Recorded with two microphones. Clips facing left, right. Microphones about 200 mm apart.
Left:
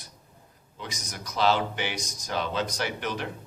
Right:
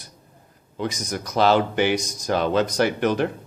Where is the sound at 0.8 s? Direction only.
50° right (ahead or behind).